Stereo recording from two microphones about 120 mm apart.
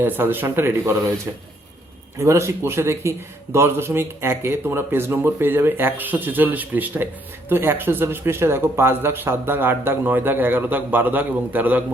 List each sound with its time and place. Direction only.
0.0 s speech: 15° right (ahead or behind)
2.1 s a man's voice: 25° right (ahead or behind)